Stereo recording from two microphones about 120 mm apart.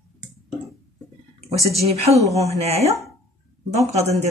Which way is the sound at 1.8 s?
60° right (ahead or behind).